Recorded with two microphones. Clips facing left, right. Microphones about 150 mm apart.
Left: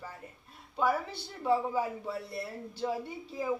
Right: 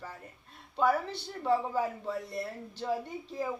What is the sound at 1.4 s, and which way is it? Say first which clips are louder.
A man's voice: even; 10° left (ahead or behind).